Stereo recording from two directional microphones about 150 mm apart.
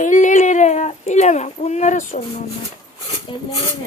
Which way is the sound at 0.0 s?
55° left (ahead or behind).